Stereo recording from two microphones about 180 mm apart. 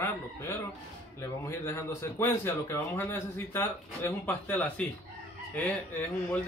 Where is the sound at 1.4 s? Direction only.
15° left (ahead or behind).